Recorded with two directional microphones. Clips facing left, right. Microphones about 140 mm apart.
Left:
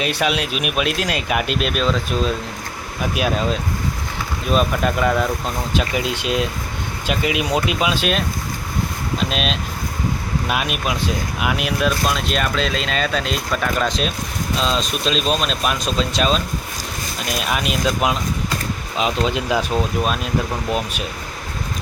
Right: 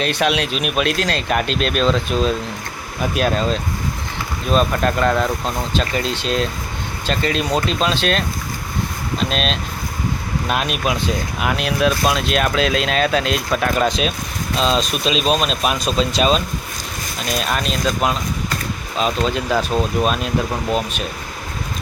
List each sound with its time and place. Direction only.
0.0 s speech: 5° left (ahead or behind)